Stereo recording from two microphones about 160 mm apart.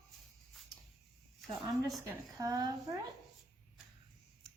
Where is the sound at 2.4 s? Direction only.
25° right (ahead or behind).